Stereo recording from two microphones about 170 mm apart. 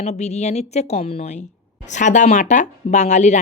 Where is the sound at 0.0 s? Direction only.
40° left (ahead or behind).